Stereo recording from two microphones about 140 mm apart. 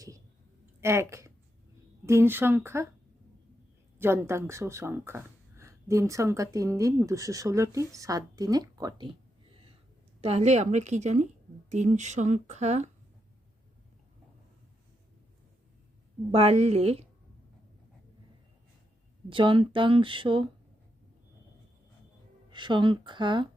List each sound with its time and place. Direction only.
0.8 s a woman's voice: 20° right (ahead or behind)
3.9 s speech: 15° right (ahead or behind)
10.2 s speech: 45° right (ahead or behind)
16.3 s a woman's voice: 45° right (ahead or behind)
19.3 s speech: 35° right (ahead or behind)
22.4 s speech: 35° right (ahead or behind)